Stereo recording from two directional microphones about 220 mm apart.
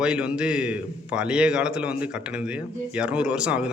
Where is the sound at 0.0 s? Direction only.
5° right (ahead or behind).